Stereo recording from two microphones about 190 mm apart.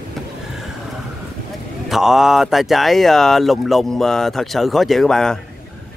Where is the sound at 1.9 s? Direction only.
Centre (ahead or behind).